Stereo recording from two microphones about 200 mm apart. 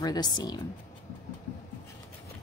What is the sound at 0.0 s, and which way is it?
Speech, 20° left (ahead or behind).